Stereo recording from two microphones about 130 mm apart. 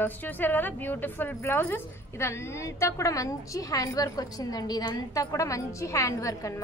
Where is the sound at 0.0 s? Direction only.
15° left (ahead or behind).